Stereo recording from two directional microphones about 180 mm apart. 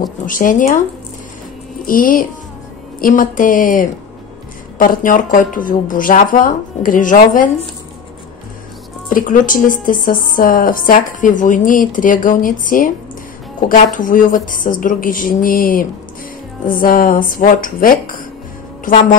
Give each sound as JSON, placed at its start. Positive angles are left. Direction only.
{"t": 0.2, "sound": "a woman's voice", "side_deg": 50}
{"t": 1.9, "sound": "a woman's voice", "side_deg": 50}
{"t": 9.1, "sound": "a woman's voice", "side_deg": 50}